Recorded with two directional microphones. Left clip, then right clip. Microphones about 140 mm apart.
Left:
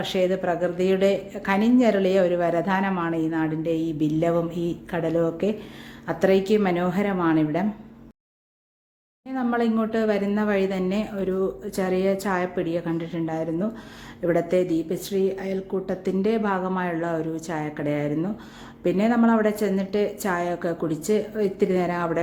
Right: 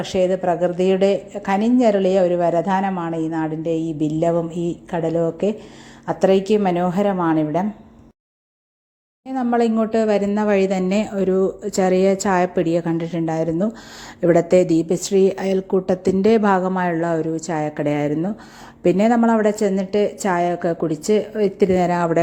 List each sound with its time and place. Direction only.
0.0 s a woman's voice: 25° right (ahead or behind)
9.2 s a woman's voice: 40° right (ahead or behind)